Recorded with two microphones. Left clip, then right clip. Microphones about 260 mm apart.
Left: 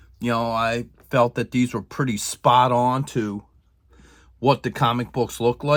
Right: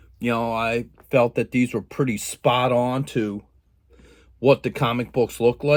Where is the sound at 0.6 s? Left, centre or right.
Centre.